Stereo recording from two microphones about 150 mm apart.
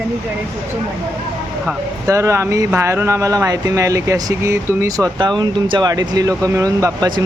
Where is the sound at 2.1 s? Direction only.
20° right (ahead or behind).